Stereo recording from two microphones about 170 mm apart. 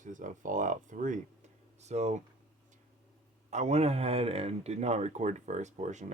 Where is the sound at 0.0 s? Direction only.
50° right (ahead or behind).